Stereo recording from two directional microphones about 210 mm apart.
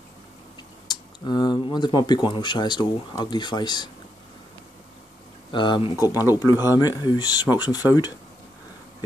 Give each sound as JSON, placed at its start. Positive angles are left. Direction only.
{"t": 0.8, "sound": "speech", "side_deg": 20}
{"t": 5.5, "sound": "speech", "side_deg": 20}